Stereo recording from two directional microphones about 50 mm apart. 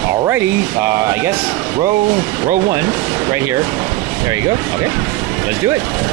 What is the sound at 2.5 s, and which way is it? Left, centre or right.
Speech, right.